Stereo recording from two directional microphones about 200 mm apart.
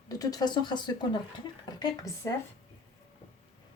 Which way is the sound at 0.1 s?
20° left (ahead or behind).